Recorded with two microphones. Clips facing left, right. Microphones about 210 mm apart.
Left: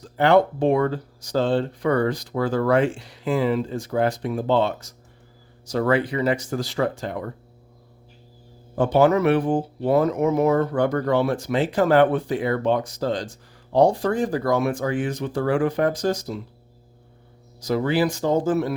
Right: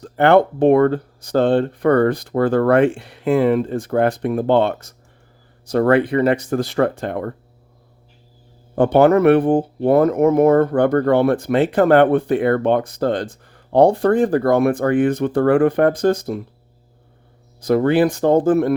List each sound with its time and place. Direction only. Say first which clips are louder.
0.0 s speech: right 4 dB; 60° right (ahead or behind)
8.7 s speech: right 5 dB; 60° right (ahead or behind)
17.6 s speech: right 6 dB; 55° right (ahead or behind)